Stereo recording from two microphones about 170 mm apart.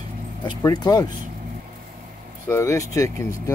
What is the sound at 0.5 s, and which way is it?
Speech, 20° left (ahead or behind).